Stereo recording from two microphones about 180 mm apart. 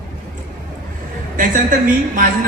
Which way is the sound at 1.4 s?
50° right (ahead or behind).